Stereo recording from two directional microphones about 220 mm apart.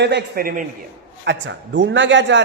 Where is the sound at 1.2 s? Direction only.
55° right (ahead or behind).